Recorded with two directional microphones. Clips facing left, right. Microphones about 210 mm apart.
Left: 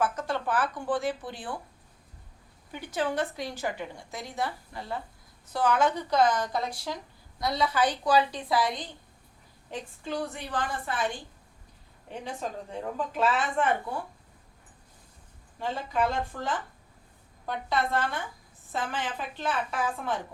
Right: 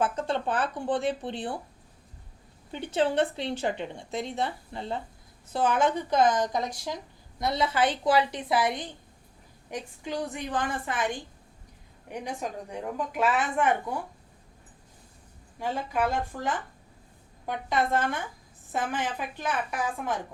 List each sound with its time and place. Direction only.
0.0 s a woman's voice: 25° right (ahead or behind)
2.7 s a woman's voice: 25° right (ahead or behind)
15.5 s a woman's voice: 15° right (ahead or behind)
17.4 s a woman's voice: 15° right (ahead or behind)